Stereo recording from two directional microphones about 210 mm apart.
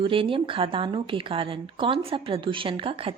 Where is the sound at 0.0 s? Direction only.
25° right (ahead or behind).